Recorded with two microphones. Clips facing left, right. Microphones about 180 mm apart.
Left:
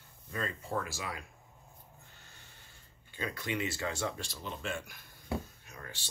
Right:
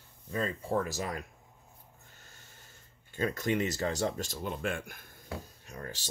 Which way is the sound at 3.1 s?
45° right (ahead or behind).